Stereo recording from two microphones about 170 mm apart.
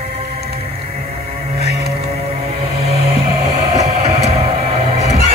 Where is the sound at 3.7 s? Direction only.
40° right (ahead or behind).